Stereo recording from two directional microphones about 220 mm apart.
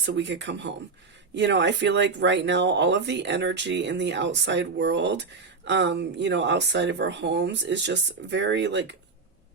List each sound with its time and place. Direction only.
0.0 s speech: 55° right (ahead or behind)